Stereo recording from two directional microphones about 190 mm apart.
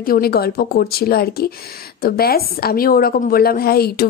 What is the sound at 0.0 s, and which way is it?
Speech, 50° left (ahead or behind).